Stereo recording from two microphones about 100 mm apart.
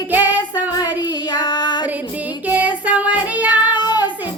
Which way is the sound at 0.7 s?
40° left (ahead or behind).